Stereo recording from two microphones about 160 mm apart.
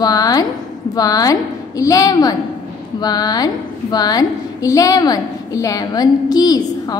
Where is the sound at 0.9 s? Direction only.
20° left (ahead or behind).